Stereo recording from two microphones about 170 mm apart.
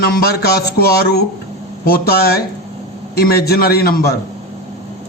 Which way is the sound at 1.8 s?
65° left (ahead or behind).